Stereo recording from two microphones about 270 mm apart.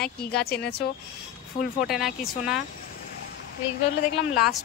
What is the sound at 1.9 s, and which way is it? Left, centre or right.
Speech, centre.